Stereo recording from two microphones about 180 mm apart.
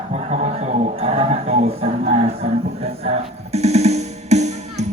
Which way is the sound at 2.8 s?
35° right (ahead or behind).